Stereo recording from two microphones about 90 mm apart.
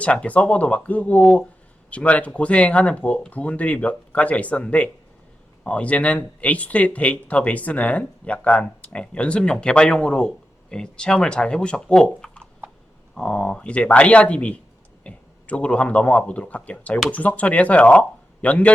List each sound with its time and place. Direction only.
0.0 s speech: 15° left (ahead or behind)